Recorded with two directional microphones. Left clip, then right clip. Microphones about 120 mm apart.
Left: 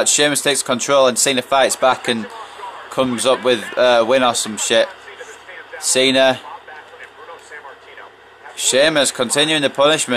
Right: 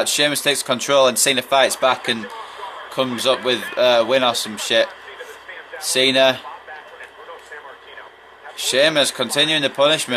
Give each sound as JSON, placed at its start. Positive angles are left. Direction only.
{"t": 0.0, "sound": "speech", "side_deg": 45}
{"t": 8.5, "sound": "speech", "side_deg": 45}